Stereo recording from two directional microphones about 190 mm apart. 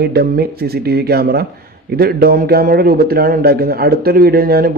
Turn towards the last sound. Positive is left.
turn(degrees=-50)  # may be behind; listen again after turning